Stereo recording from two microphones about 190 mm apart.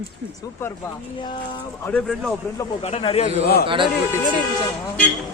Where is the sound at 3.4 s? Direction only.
55° left (ahead or behind).